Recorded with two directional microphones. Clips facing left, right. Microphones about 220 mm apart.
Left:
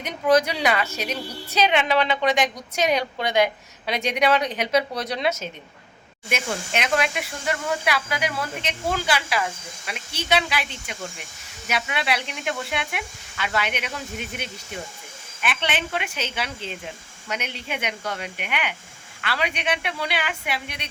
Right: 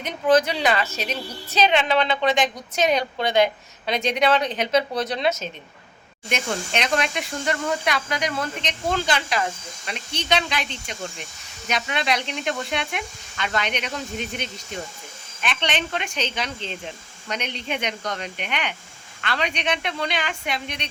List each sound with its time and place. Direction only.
0.0 s a woman's voice: 10° left (ahead or behind)